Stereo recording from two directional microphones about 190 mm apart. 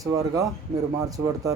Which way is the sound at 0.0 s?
20° right (ahead or behind).